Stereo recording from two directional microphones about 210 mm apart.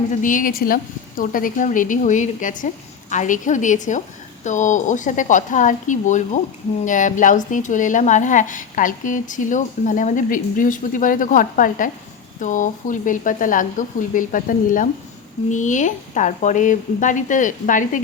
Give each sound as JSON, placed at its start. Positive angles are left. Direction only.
{"t": 0.2, "sound": "speech", "side_deg": 40}